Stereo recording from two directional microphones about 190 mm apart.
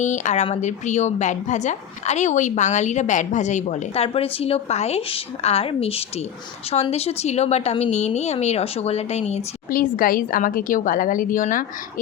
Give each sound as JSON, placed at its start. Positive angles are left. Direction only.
{"t": 0.0, "sound": "a woman's voice", "side_deg": 40}